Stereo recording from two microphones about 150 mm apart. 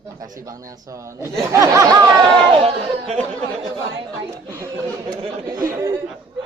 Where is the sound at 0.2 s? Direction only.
20° right (ahead or behind).